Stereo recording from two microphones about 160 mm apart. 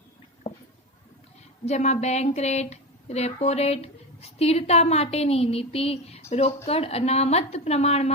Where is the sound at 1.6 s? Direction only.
45° left (ahead or behind).